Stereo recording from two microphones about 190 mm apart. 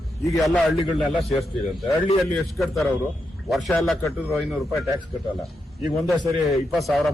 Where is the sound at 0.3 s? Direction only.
Centre (ahead or behind).